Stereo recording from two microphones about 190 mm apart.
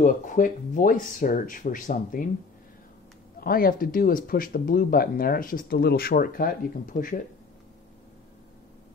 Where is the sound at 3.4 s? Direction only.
50° left (ahead or behind).